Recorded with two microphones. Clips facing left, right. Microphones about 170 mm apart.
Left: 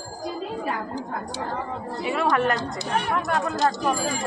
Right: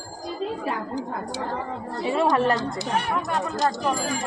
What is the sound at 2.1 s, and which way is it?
Speech, 30° right (ahead or behind).